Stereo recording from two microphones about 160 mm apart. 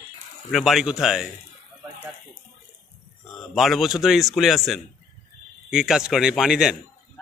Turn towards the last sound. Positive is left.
turn(degrees=-5)  # may be behind; listen again after turning